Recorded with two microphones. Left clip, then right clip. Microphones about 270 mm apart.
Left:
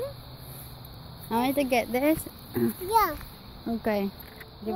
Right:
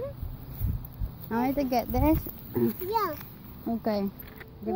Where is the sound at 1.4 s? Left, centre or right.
Left.